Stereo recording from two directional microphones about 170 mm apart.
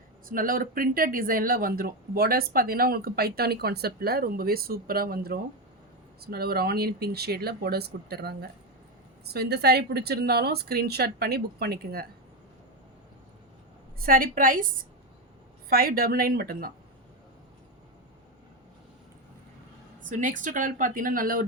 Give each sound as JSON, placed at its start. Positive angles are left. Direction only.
{"t": 0.3, "sound": "a woman's voice", "side_deg": -55}
{"t": 14.0, "sound": "speech", "side_deg": -55}
{"t": 15.7, "sound": "speech", "side_deg": -60}
{"t": 20.1, "sound": "speech", "side_deg": -50}